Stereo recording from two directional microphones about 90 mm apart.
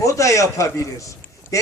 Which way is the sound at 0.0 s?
35° left (ahead or behind).